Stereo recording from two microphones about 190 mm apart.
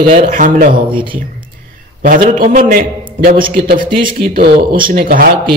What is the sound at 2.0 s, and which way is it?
A man's voice, 45° right (ahead or behind).